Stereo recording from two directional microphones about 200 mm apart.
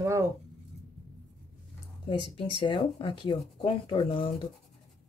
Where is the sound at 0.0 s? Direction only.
15° right (ahead or behind).